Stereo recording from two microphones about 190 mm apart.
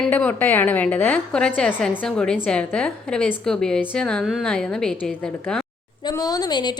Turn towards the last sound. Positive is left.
turn(degrees=20)  # may be behind; listen again after turning